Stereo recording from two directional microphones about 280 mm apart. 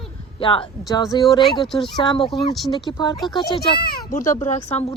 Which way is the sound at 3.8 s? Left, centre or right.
Left.